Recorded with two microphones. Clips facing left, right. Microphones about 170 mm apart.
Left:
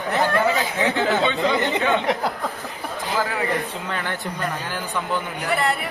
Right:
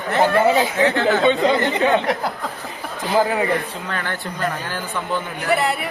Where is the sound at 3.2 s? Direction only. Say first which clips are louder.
Right 5 dB; 20° right (ahead or behind).